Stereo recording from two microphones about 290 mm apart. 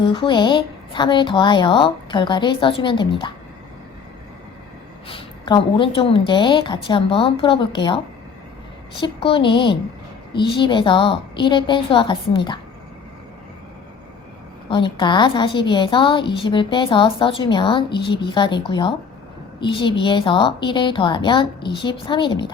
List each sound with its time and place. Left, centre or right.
0.0 s a woman's voice: centre
5.0 s a woman's voice: centre
14.7 s a woman's voice: centre